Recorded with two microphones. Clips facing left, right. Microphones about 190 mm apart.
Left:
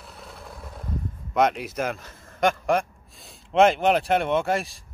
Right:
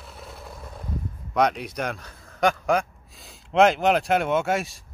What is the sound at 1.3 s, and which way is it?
Speech, centre (ahead or behind).